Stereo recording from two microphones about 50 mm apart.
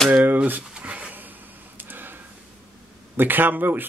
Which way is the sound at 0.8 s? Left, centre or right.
Right.